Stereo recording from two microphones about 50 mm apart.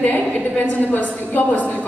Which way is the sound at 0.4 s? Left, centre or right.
Left.